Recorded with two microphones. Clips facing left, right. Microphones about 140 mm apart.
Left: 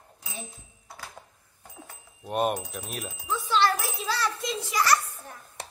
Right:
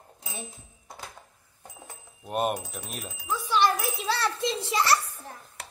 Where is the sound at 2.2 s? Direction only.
Centre (ahead or behind).